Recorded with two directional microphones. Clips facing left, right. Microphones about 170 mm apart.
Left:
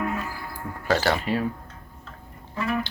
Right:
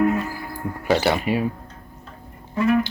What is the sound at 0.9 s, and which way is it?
Speech, 15° right (ahead or behind).